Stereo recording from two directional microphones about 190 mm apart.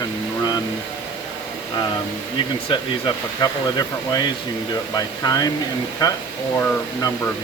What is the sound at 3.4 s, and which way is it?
Speech, 20° left (ahead or behind).